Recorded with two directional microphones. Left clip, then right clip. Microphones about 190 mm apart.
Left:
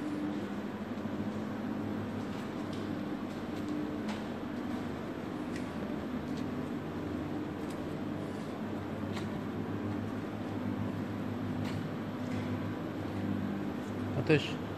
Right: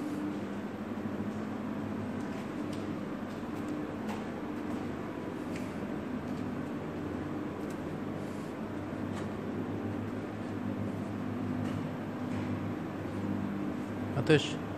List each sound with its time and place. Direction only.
14.3 s speech: 20° right (ahead or behind)